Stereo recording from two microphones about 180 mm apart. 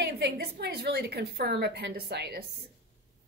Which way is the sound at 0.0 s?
65° right (ahead or behind).